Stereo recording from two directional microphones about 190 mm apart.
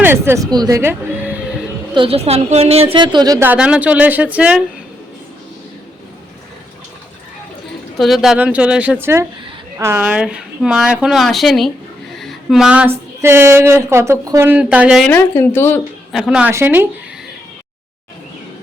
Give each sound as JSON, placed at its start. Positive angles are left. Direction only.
{"t": 0.0, "sound": "speech", "side_deg": -10}
{"t": 1.9, "sound": "a woman's voice", "side_deg": -30}
{"t": 7.9, "sound": "speech", "side_deg": 0}
{"t": 12.2, "sound": "a sound", "side_deg": 0}
{"t": 13.2, "sound": "speech", "side_deg": -15}
{"t": 15.1, "sound": "speech", "side_deg": 10}
{"t": 16.1, "sound": "speech", "side_deg": -5}